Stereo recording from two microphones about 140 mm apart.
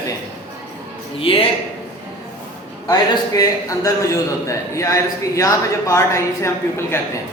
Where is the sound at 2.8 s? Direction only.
25° left (ahead or behind).